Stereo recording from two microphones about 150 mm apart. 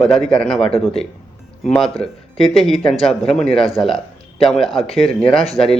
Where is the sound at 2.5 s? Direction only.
Centre (ahead or behind).